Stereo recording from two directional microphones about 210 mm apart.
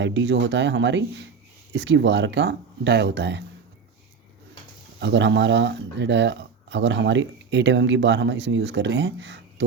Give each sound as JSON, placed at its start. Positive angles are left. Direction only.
{"t": 0.0, "sound": "speech", "side_deg": -55}
{"t": 4.9, "sound": "speech", "side_deg": -60}